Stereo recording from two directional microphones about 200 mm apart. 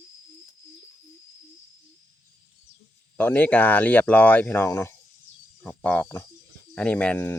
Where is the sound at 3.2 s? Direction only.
10° left (ahead or behind).